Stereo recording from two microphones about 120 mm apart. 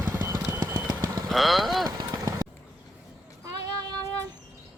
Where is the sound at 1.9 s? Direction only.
30° right (ahead or behind).